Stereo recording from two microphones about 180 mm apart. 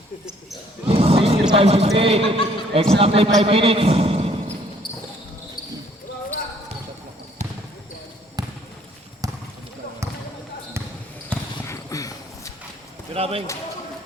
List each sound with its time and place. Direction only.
0.9 s music: 35° right (ahead or behind)
2.0 s a man's voice: 30° right (ahead or behind)
8.4 s basketball bounce: 20° right (ahead or behind)
11.3 s basketball bounce: 15° left (ahead or behind)
13.1 s a sound: 35° right (ahead or behind)